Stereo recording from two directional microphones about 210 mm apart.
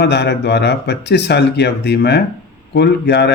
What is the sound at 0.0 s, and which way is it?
Speech, 50° left (ahead or behind).